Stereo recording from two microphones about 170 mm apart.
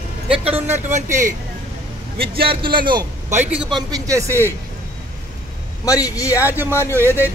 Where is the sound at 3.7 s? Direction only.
20° right (ahead or behind).